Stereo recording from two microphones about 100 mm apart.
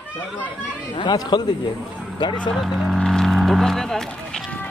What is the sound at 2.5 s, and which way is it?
Speech, 5° left (ahead or behind).